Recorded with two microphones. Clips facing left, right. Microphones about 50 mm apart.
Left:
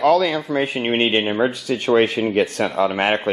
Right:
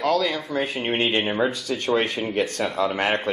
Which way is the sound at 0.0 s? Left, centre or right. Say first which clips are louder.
Left 6 dB; centre.